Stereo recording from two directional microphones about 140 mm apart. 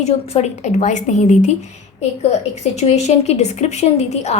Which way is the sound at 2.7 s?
50° left (ahead or behind).